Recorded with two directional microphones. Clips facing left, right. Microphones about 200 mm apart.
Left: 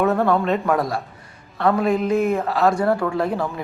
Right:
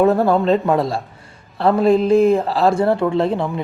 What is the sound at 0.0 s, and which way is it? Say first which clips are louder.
A man's voice: right 4 dB; 30° right (ahead or behind).